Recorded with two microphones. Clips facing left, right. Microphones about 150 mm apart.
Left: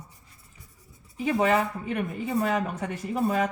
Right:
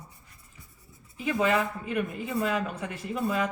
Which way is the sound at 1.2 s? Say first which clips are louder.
Left 2 dB; 40° left (ahead or behind).